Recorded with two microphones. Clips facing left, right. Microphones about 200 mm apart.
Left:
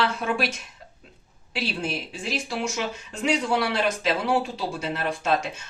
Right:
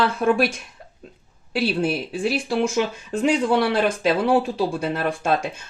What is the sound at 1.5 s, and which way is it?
Speech, 50° right (ahead or behind).